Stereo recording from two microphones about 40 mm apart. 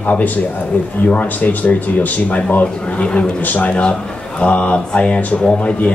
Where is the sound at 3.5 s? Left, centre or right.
Left.